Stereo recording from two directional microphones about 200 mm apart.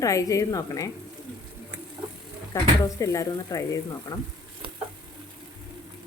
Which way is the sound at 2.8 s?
15° left (ahead or behind).